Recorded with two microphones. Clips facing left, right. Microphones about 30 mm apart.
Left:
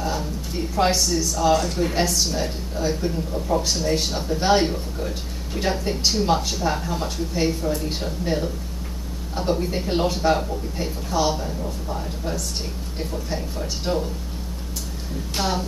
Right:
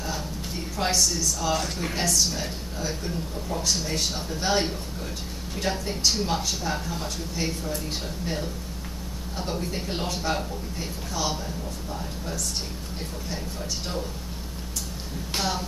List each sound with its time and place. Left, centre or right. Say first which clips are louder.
0.7 s speech: left 5 dB; centre
3.3 s speech: left 4 dB; centre
15.3 s speech: left 3 dB; centre